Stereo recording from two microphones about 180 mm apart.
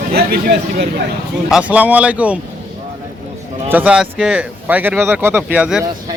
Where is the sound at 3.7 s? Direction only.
5° right (ahead or behind).